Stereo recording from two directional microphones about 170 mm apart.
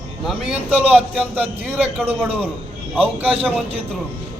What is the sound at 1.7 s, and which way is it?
Speech, 10° right (ahead or behind).